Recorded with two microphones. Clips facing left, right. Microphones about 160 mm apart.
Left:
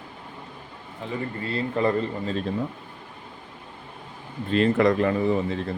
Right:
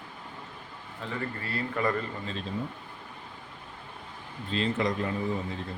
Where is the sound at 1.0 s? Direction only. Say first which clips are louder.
Left 5 dB; 20° left (ahead or behind).